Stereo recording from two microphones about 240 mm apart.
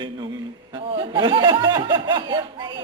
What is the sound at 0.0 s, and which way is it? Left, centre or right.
A man's voice, centre.